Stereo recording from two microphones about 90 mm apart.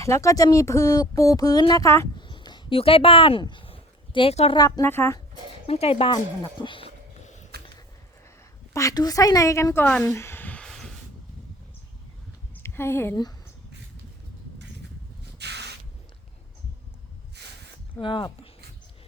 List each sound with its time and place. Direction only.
0.0 s speech: 35° left (ahead or behind)
2.1 s a sound: 55° left (ahead or behind); by 4.5 s 85° left
4.5 s a woman's voice: 50° left (ahead or behind)
4.8 s speech: 25° left (ahead or behind)
5.5 s speech: 90° left
6.1 s speech: 60° left (ahead or behind)
8.7 s speech: 40° left (ahead or behind)
10.0 s a sound: 30° left (ahead or behind)
10.7 s a sound: 5° left (ahead or behind)
12.6 s speech: 30° left (ahead or behind)
18.0 s speech: 70° left (ahead or behind)